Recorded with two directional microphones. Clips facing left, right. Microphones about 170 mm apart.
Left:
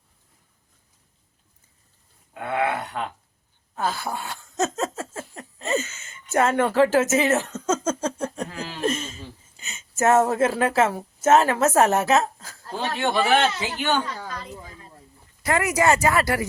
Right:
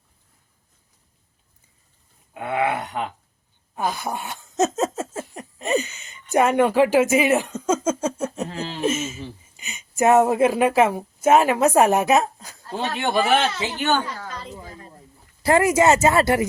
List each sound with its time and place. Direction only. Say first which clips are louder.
2.3 s speech: right 2 dB; 20° right (ahead or behind)
3.8 s laughter: right 1 dB; 15° right (ahead or behind)
4.9 s a sound: right 4 dB; 20° right (ahead or behind)
8.4 s speech: right 4 dB; 25° right (ahead or behind)
8.8 s speech: right 2 dB; 5° right (ahead or behind)
15.4 s speech: right 4 dB; 30° right (ahead or behind)